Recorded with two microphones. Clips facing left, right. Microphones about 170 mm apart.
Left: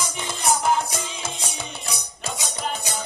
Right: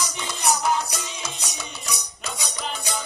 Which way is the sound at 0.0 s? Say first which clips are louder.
Even; 50° left (ahead or behind).